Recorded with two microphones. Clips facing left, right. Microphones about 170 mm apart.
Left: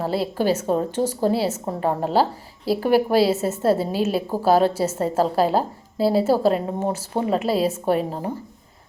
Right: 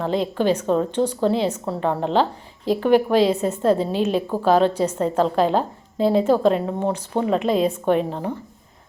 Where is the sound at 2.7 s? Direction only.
10° left (ahead or behind).